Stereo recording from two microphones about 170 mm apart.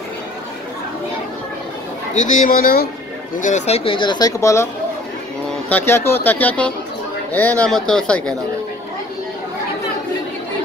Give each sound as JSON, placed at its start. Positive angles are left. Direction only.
{"t": 2.1, "sound": "speech", "side_deg": 50}
{"t": 3.3, "sound": "speech", "side_deg": 45}
{"t": 5.7, "sound": "speech", "side_deg": 15}